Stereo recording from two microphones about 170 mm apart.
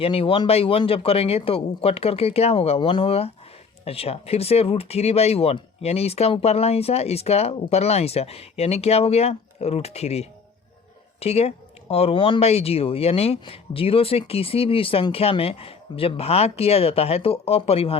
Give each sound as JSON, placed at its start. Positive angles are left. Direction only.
{"t": 0.0, "sound": "speech", "side_deg": 35}